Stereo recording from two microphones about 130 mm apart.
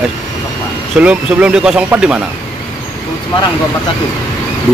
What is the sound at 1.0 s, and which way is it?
Speech, 10° right (ahead or behind).